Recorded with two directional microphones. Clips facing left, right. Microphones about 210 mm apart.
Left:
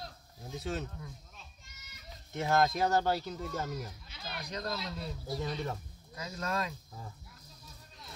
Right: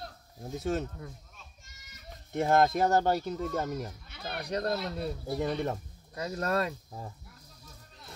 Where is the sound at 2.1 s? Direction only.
50° right (ahead or behind).